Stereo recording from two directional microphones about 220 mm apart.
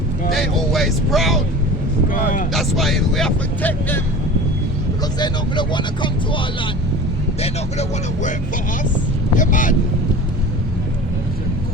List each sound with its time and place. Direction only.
0.3 s vehicle: centre (ahead or behind)
2.0 s vehicle: 40° left (ahead or behind)
2.5 s speech: centre (ahead or behind)
5.2 s speech: 20° left (ahead or behind)
7.4 s speech: 30° left (ahead or behind)